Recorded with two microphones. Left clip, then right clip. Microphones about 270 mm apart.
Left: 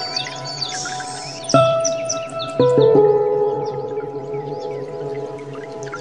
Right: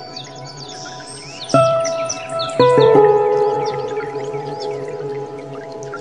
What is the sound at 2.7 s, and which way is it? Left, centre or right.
Music, right.